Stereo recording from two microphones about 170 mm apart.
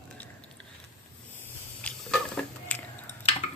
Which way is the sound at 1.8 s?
5° left (ahead or behind).